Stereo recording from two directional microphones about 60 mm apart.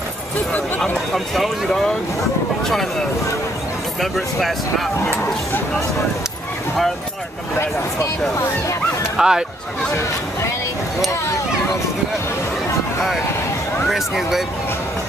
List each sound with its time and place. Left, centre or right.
0.5 s speech: centre
1.1 s speech: centre
4.0 s speech: centre
9.1 s speech: centre
13.8 s speech: centre